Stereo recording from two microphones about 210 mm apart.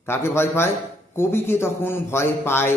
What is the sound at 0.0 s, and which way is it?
A man's voice, 10° left (ahead or behind).